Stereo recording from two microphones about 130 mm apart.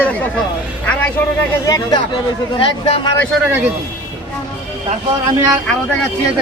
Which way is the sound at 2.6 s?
45° left (ahead or behind).